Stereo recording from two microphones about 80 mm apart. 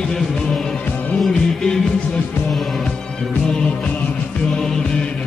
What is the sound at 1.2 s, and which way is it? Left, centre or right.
Music, centre.